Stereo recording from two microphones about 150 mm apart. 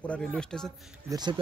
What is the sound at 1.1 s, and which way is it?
Speech, 30° right (ahead or behind).